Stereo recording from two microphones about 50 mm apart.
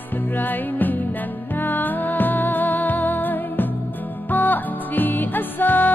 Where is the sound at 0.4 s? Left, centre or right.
Left.